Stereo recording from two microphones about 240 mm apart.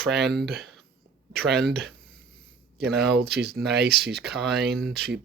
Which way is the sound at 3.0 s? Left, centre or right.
Right.